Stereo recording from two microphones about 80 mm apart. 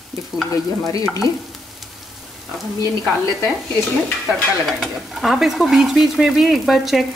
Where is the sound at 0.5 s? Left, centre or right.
Left.